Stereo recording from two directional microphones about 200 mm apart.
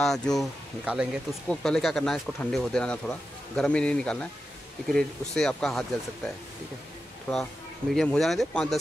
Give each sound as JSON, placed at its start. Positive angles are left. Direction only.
{"t": 0.0, "sound": "speech", "side_deg": 0}
{"t": 7.9, "sound": "speech", "side_deg": 0}